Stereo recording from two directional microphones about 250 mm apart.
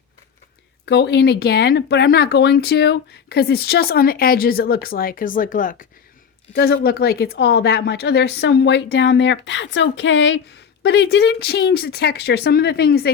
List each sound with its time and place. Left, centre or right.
0.9 s a woman's voice: left